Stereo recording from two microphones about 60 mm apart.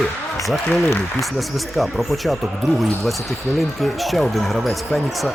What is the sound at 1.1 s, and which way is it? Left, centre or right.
Speech, centre.